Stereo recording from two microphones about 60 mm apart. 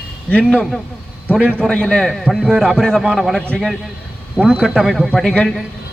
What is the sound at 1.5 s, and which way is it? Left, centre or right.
A man's voice, centre.